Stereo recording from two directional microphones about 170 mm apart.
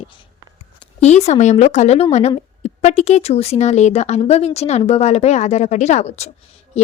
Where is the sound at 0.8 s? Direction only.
40° left (ahead or behind).